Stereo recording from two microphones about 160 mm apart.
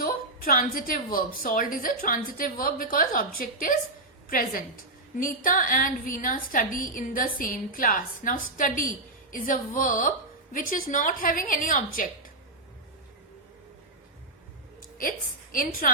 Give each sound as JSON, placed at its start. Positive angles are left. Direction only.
{"t": 0.0, "sound": "a woman's voice", "side_deg": 65}
{"t": 15.8, "sound": "a woman's voice", "side_deg": 55}